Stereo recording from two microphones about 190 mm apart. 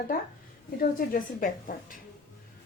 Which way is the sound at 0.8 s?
50° left (ahead or behind).